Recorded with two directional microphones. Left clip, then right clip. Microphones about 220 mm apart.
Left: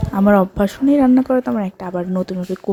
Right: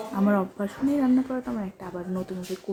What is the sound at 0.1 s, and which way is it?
A woman's voice, 40° left (ahead or behind).